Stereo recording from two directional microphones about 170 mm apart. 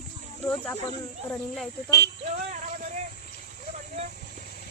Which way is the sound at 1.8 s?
75° left (ahead or behind).